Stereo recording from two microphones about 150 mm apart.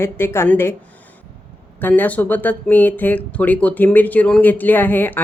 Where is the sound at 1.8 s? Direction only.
10° left (ahead or behind).